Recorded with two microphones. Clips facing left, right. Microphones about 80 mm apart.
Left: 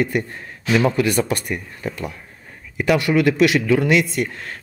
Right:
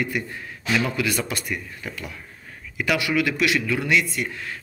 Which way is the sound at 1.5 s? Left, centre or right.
Left.